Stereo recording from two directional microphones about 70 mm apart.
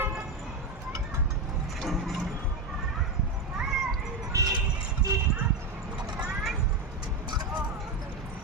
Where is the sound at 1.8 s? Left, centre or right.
Centre.